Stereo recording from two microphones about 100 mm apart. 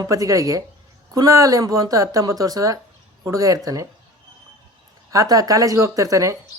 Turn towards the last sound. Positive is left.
turn(degrees=-35)  # may be behind; listen again after turning